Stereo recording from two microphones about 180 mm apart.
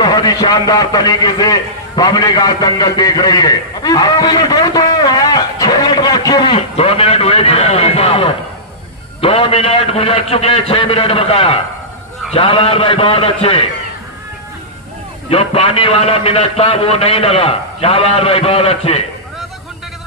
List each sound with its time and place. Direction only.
0.0 s a man's voice: 20° left (ahead or behind)
15.2 s a man's voice: 35° left (ahead or behind)